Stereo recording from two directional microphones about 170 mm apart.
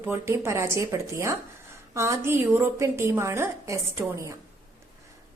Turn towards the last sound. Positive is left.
turn(degrees=-15)  # may be behind; listen again after turning